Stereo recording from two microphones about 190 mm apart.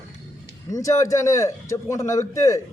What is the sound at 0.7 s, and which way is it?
Speech, 15° left (ahead or behind).